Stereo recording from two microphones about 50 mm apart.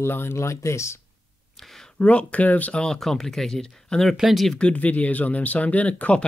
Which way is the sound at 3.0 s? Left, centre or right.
Centre.